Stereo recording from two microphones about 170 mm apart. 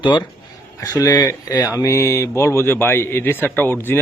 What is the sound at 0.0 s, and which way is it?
A man's voice, 25° left (ahead or behind).